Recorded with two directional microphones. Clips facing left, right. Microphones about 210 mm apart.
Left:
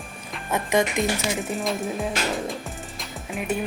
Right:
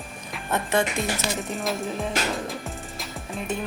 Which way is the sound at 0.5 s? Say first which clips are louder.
Left 2 dB; 15° left (ahead or behind).